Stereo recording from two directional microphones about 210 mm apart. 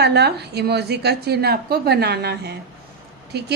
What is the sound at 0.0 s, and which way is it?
A woman's voice, 50° right (ahead or behind).